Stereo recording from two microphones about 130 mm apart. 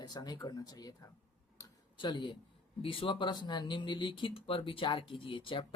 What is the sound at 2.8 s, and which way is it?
Speech, 45° left (ahead or behind).